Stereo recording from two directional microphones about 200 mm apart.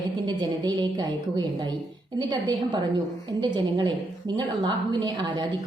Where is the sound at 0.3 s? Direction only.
20° right (ahead or behind).